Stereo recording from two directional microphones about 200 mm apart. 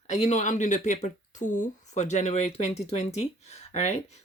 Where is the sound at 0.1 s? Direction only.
35° left (ahead or behind).